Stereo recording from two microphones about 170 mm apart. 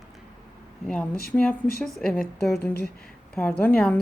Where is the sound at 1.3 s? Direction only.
10° left (ahead or behind).